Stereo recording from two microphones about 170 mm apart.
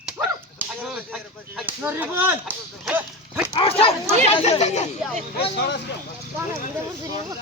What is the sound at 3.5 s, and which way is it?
Speech, 35° left (ahead or behind).